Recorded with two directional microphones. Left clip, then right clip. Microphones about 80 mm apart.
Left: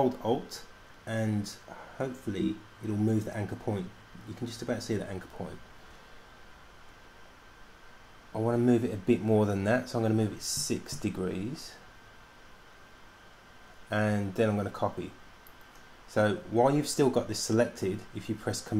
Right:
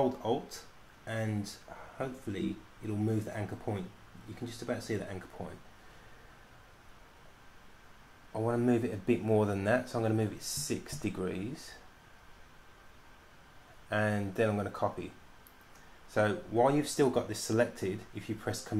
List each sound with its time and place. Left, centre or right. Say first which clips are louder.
0.0 s speech: left 3 dB; centre
8.3 s speech: left 3 dB; centre
13.8 s speech: left 2 dB; centre
16.1 s speech: left 3 dB; centre